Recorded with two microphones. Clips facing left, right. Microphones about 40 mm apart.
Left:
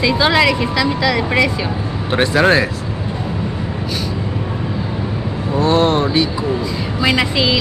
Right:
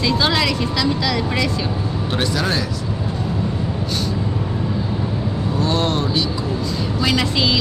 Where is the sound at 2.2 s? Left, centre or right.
Left.